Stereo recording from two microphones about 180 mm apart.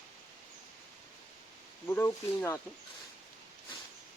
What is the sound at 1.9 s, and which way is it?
Speech, 15° left (ahead or behind).